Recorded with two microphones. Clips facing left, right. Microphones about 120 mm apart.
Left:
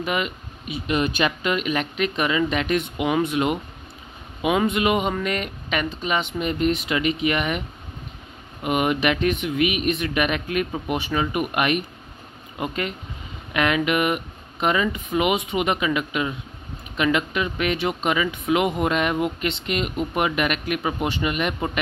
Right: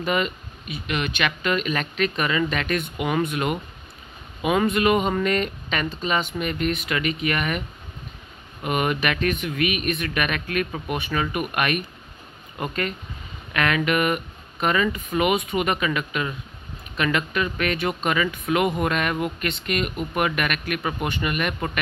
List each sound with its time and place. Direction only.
0.0 s speech: 10° left (ahead or behind)
0.7 s speech: 25° left (ahead or behind)
1.5 s speech: 15° left (ahead or behind)
8.6 s speech: 15° left (ahead or behind)